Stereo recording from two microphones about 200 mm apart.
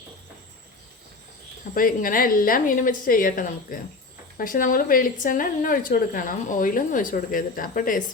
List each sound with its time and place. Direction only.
1.7 s a woman's voice: 45° left (ahead or behind)